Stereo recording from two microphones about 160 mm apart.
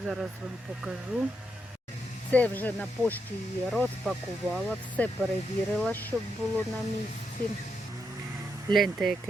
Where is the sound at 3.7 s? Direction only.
Centre (ahead or behind).